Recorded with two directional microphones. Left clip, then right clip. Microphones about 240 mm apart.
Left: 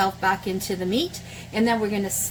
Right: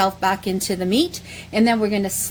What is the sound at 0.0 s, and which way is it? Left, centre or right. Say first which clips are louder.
A woman's voice: right 3 dB; right.